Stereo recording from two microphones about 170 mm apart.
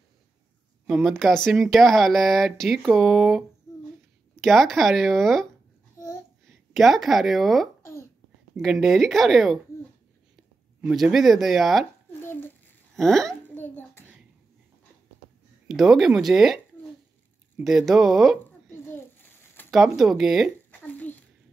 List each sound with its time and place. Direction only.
0.8 s speech: centre (ahead or behind)
5.9 s babbling: 15° left (ahead or behind)
6.7 s speech: centre (ahead or behind)
7.8 s babbling: 15° left (ahead or behind)
8.5 s speech: centre (ahead or behind)
10.8 s speech: 5° right (ahead or behind)
12.1 s a sound: 15° left (ahead or behind)
12.9 s babbling: centre (ahead or behind)
15.7 s speech: centre (ahead or behind)
19.7 s speech: centre (ahead or behind)
20.8 s a sound: 10° left (ahead or behind)